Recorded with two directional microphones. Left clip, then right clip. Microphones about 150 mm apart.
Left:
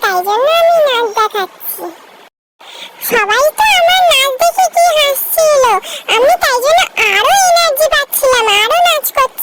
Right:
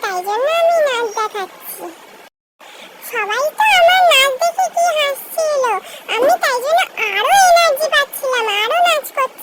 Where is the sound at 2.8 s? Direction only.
50° left (ahead or behind).